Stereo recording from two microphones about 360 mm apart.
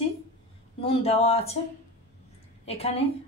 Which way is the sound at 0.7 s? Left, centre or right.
Centre.